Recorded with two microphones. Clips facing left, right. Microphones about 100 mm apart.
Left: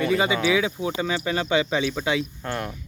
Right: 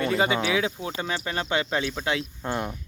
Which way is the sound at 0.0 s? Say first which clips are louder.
Left 2 dB; centre (ahead or behind).